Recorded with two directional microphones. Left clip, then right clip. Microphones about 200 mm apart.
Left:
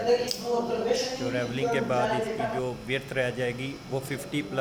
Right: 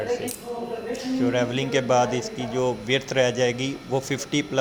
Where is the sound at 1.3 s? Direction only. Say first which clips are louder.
Right 5 dB; 15° right (ahead or behind).